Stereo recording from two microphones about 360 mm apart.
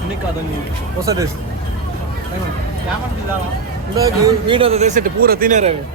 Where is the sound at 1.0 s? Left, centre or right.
Centre.